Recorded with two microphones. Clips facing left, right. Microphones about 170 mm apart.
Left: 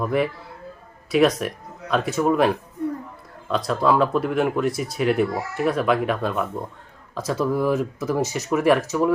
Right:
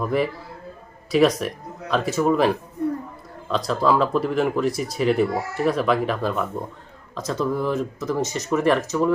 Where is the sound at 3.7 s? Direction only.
Centre (ahead or behind).